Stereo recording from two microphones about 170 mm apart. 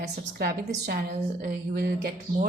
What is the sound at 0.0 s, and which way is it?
A woman's voice, 65° right (ahead or behind).